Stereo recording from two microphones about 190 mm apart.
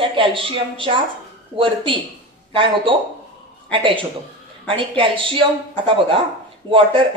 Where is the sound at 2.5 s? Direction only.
25° right (ahead or behind).